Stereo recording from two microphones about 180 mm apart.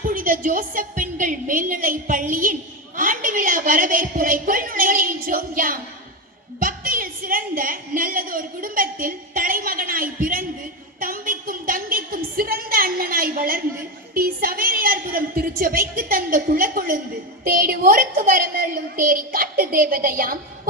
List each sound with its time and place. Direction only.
0.0 s a woman's voice: 50° right (ahead or behind)
11.0 s a sound: 50° right (ahead or behind)
14.1 s a woman's voice: 55° right (ahead or behind)